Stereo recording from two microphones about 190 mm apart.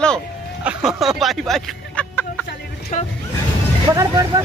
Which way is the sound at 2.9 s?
40° left (ahead or behind).